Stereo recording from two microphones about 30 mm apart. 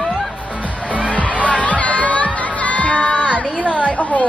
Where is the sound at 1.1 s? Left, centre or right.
Left.